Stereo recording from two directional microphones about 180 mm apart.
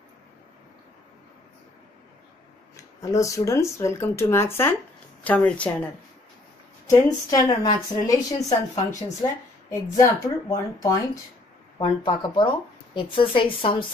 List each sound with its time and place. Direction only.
2.7 s speech: 15° left (ahead or behind)
6.9 s speech: 20° left (ahead or behind)
9.7 s speech: 20° left (ahead or behind)